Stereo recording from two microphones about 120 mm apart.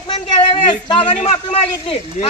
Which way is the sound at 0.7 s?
40° left (ahead or behind).